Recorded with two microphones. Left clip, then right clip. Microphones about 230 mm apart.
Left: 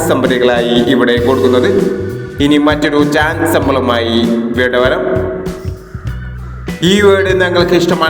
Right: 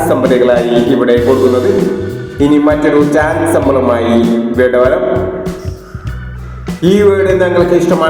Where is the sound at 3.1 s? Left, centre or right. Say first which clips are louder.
Right 1 dB; left.